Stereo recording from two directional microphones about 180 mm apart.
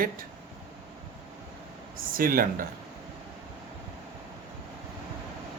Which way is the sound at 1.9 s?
50° right (ahead or behind).